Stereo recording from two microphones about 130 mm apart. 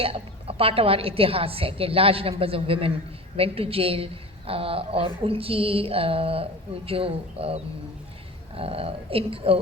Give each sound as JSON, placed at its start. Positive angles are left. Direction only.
{"t": 0.0, "sound": "a woman's voice", "side_deg": -45}